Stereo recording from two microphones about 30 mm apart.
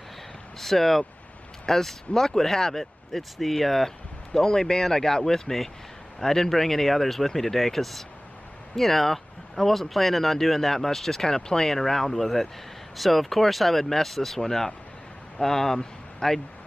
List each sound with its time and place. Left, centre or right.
0.6 s speech: centre
3.2 s speech: centre
15.8 s a sound: centre